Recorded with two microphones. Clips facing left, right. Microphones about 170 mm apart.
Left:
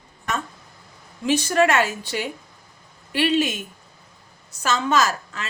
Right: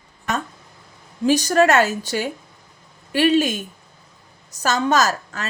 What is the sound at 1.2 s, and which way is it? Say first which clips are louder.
A woman's voice: right 3 dB; 40° right (ahead or behind).